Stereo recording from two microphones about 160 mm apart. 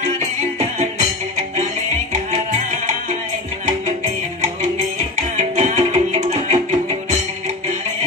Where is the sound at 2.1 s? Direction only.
50° right (ahead or behind).